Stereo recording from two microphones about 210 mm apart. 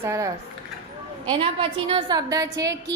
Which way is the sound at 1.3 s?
25° right (ahead or behind).